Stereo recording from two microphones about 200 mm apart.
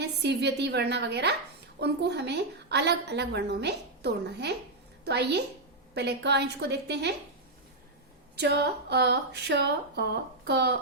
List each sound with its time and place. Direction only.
0.0 s a woman's voice: 55° right (ahead or behind)
8.4 s a woman's voice: 55° right (ahead or behind)